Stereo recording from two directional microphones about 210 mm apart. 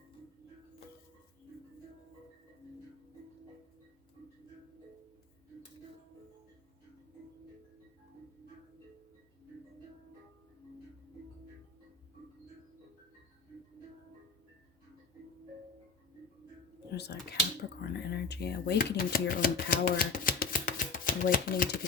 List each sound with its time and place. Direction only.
16.9 s speech: 50° left (ahead or behind)